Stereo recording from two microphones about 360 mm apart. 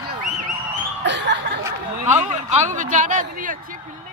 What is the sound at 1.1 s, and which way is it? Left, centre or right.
Chuckle, right.